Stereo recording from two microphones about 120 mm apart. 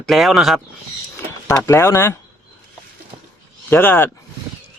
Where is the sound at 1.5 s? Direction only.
20° left (ahead or behind).